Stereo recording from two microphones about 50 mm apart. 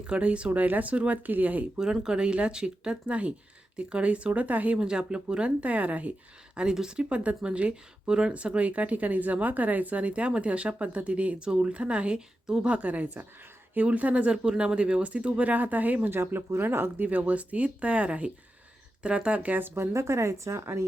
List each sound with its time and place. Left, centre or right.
0.1 s speech: right
1.8 s speech: centre; by 4.8 s right
4.8 s speech: centre
6.7 s speech: centre
14.4 s speech: centre; by 16.0 s right
16.0 s speech: right
17.1 s speech: right
19.5 s speech: right
19.9 s a woman's voice: right